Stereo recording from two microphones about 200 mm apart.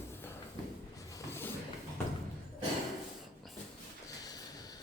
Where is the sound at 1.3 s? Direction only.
10° left (ahead or behind).